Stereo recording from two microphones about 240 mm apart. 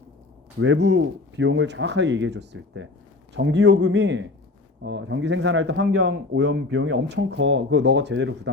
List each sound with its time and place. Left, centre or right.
0.6 s speech: right